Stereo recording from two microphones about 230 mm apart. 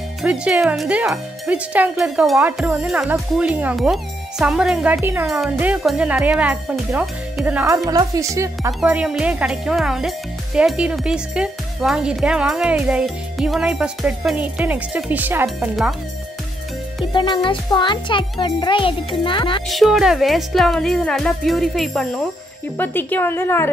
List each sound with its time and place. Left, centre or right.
0.2 s speech: centre
17.0 s a child's voice: left
19.7 s a woman's voice: centre